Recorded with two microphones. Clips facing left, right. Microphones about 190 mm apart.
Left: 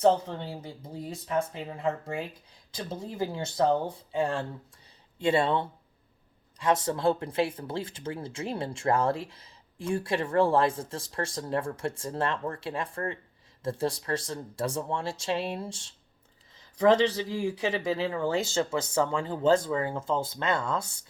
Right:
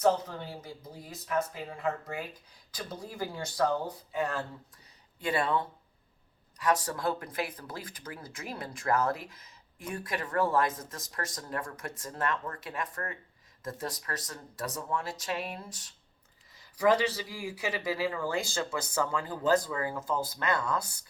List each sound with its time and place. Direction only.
0.0 s speech: 25° left (ahead or behind)